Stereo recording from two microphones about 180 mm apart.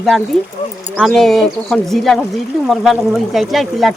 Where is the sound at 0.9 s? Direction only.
Centre (ahead or behind).